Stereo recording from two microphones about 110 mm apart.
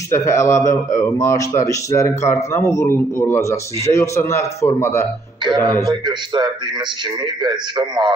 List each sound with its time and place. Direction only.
0.1 s a man's voice: 25° left (ahead or behind)
5.9 s a man's voice: 40° right (ahead or behind)